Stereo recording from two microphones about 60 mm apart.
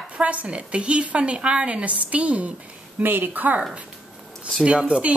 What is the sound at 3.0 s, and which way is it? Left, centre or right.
Speech, right.